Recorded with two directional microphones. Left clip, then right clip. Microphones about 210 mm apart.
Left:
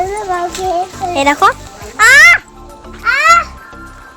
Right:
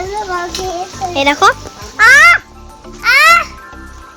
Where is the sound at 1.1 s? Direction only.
5° right (ahead or behind).